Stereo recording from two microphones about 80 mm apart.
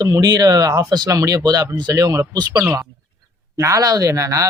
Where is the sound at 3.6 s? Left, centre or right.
Right.